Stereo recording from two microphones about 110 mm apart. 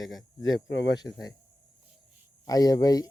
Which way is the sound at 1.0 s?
35° left (ahead or behind).